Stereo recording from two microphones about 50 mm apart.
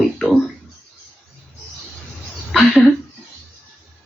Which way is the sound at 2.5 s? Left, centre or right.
Centre.